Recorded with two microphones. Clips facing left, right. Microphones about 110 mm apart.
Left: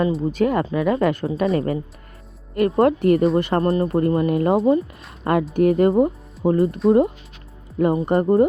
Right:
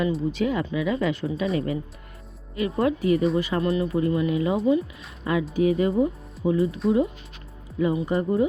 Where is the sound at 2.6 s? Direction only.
65° left (ahead or behind).